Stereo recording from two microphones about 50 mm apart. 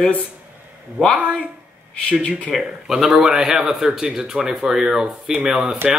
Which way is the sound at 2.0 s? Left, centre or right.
Left.